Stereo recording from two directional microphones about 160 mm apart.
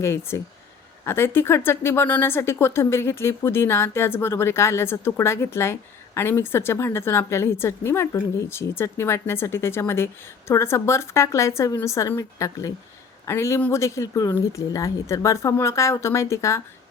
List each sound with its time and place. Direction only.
0.0 s speech: 15° left (ahead or behind)